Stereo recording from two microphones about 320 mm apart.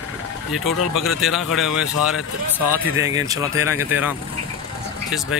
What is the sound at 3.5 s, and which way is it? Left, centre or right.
Speech, left.